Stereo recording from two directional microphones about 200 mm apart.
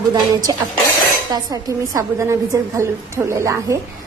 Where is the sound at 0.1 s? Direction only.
20° right (ahead or behind).